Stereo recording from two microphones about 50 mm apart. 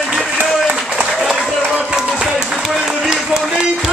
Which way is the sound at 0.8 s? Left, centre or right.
Centre.